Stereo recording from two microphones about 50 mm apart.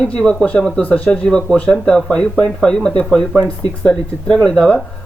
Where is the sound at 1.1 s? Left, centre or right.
Centre.